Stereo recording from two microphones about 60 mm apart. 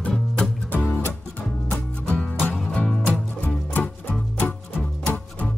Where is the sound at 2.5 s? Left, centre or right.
Centre.